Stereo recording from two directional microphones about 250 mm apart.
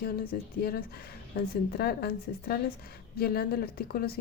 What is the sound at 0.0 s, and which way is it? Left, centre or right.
A woman's voice, left.